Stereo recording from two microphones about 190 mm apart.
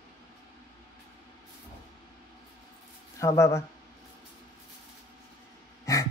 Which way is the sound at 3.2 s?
15° left (ahead or behind).